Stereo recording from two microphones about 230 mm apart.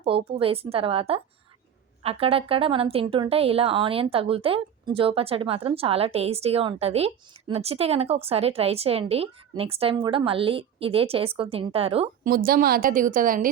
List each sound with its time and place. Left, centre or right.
0.0 s a woman's voice: right
12.3 s a woman's voice: right